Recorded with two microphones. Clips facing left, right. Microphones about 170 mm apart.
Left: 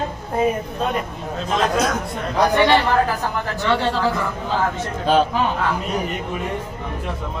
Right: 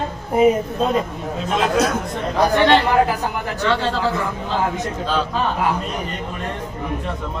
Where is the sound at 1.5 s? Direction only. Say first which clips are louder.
Right 1 dB; 5° right (ahead or behind).